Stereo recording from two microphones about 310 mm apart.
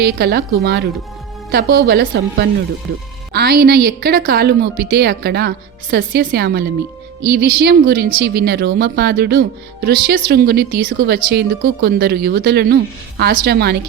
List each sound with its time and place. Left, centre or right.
0.0 s speech: right